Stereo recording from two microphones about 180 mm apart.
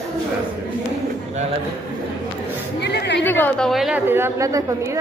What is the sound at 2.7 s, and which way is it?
Chatter, 70° left (ahead or behind).